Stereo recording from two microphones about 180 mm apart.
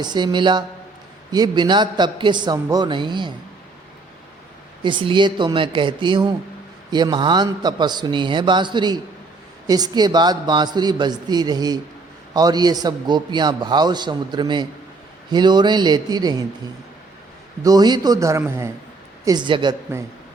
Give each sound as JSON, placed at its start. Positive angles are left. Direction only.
{"t": 0.0, "sound": "a man's voice", "side_deg": -25}
{"t": 4.8, "sound": "a man's voice", "side_deg": -25}
{"t": 17.6, "sound": "a man's voice", "side_deg": -20}